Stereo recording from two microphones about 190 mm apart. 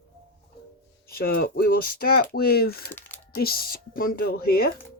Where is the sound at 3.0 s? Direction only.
10° left (ahead or behind).